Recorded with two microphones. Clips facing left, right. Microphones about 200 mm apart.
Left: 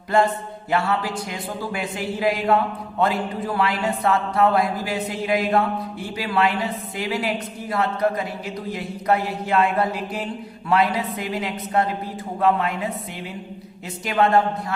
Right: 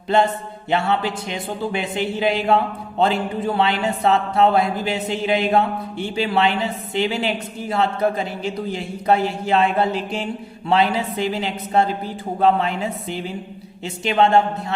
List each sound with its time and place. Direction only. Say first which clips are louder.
0.7 s a man's voice: right 2 dB; 25° right (ahead or behind)